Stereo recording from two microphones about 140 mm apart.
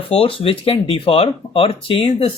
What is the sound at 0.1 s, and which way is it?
Speech, 40° left (ahead or behind).